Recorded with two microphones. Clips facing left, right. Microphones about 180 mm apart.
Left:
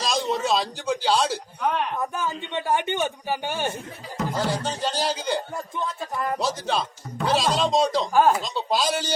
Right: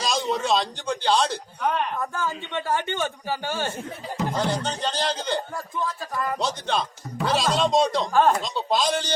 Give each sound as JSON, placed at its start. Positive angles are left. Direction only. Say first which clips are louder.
{"t": 0.0, "sound": "speech", "louder": "even", "side_deg": 0}
{"t": 2.0, "sound": "a man's voice", "louder": "left 1 dB", "side_deg": 15}
{"t": 4.4, "sound": "a man's voice", "louder": "left 1 dB", "side_deg": 5}
{"t": 5.5, "sound": "speech", "louder": "even", "side_deg": 20}
{"t": 6.4, "sound": "speech", "louder": "even", "side_deg": 5}